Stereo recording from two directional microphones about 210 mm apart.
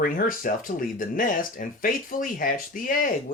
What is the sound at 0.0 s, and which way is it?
Speech, 40° left (ahead or behind).